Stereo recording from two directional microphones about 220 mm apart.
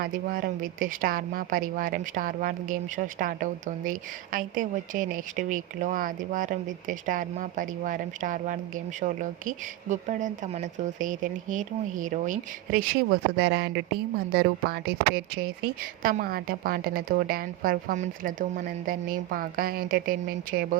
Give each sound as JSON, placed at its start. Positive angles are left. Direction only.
{"t": 0.0, "sound": "a woman's voice", "side_deg": -40}